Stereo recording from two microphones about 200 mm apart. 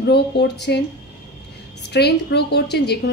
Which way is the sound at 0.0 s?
55° left (ahead or behind).